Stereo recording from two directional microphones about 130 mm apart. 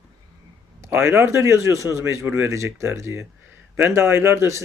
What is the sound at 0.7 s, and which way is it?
A man's voice, 20° right (ahead or behind).